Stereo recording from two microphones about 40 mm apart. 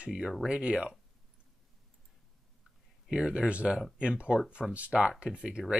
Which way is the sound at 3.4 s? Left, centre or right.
Right.